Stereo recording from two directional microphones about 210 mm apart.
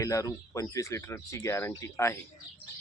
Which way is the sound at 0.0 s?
15° left (ahead or behind).